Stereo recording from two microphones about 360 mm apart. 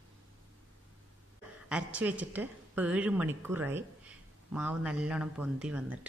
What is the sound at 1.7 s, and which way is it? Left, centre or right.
A woman's voice, centre.